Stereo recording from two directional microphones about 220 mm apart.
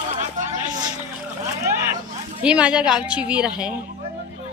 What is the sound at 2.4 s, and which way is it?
A woman's voice, 5° right (ahead or behind).